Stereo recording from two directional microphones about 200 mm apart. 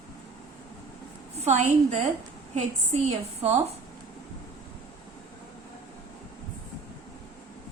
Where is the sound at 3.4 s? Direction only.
30° right (ahead or behind).